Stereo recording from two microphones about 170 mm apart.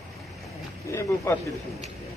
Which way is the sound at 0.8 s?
15° left (ahead or behind).